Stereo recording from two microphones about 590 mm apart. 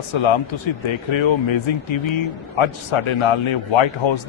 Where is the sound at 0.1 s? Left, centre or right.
Left.